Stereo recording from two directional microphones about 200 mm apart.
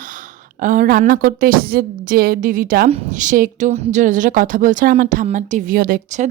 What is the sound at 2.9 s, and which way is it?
A woman's voice, 35° right (ahead or behind).